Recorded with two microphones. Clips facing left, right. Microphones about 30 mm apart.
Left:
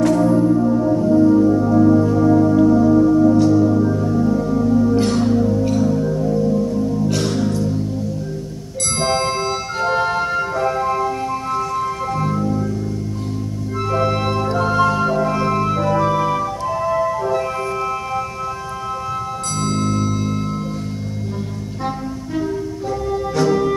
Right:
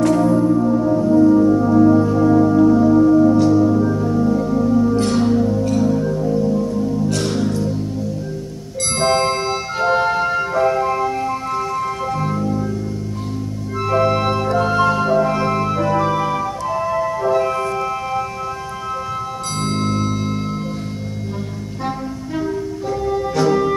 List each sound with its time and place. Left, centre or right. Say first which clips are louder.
0.1 s music: even; centre
9.0 s music: right 2 dB; centre
12.2 s music: left 1 dB; centre
13.7 s music: right 3 dB; centre
19.6 s tubular bells: even; right
21.8 s music: even; centre